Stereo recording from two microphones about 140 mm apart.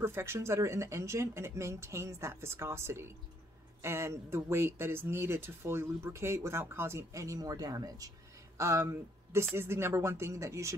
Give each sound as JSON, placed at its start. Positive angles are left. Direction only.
{"t": 0.0, "sound": "speech", "side_deg": -20}